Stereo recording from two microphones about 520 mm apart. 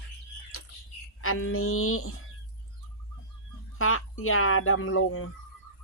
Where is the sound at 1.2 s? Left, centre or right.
Left.